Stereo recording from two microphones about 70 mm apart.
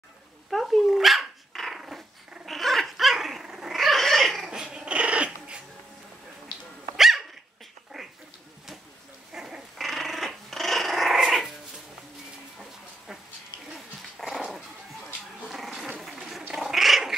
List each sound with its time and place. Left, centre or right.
0.5 s dog: centre
4.5 s dog: centre
6.5 s dog: left
7.0 s dog: centre
9.3 s dog: centre
9.8 s dog: centre
14.1 s dog: centre
16.4 s cat: centre